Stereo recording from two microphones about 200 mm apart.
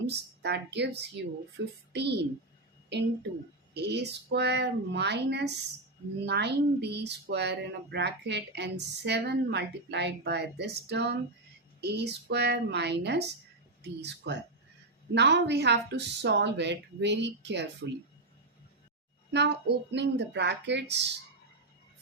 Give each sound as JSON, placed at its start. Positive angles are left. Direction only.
{"t": 0.1, "sound": "a child's voice", "side_deg": -60}
{"t": 19.3, "sound": "speech", "side_deg": -60}